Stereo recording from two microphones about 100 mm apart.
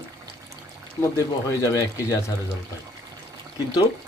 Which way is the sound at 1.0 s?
30° left (ahead or behind).